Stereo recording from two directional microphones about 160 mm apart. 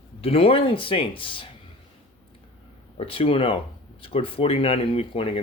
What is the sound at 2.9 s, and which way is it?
Speech, 35° left (ahead or behind).